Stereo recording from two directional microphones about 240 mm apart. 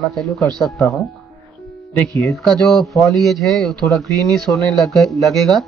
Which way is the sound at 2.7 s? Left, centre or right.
Centre.